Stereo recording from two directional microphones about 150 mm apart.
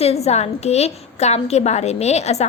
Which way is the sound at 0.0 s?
45° left (ahead or behind).